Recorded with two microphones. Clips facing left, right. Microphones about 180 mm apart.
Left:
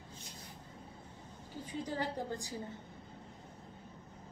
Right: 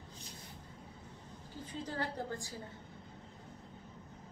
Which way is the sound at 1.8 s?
15° left (ahead or behind).